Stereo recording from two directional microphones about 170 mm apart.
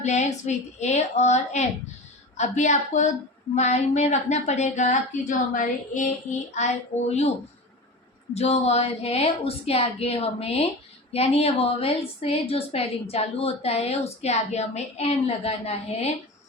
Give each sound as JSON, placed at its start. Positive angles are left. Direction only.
{"t": 0.0, "sound": "a woman's voice", "side_deg": 45}
{"t": 8.4, "sound": "a woman's voice", "side_deg": 40}